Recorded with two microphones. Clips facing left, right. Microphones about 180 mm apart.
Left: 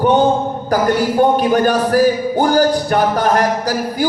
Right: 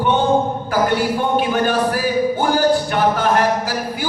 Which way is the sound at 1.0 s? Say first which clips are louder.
Left 5 dB; 40° left (ahead or behind).